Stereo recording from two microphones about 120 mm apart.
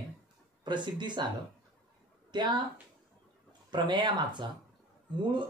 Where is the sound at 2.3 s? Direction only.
40° right (ahead or behind).